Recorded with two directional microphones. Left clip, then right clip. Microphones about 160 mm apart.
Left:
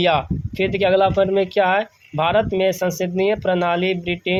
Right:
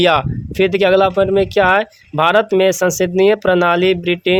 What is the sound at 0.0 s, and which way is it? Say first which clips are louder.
Speech: right 5 dB; 40° right (ahead or behind).